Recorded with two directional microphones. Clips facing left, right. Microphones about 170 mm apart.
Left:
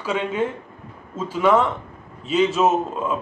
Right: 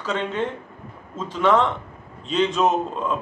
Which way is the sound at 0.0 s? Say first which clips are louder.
Left 2 dB; 10° left (ahead or behind).